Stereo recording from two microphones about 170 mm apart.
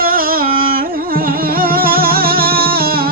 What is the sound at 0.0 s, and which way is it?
Music, 60° right (ahead or behind).